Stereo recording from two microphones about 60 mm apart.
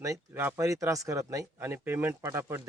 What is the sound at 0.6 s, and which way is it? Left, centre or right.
Speech, right.